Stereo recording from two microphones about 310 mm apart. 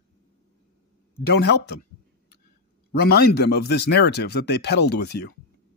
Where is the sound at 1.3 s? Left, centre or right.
Left.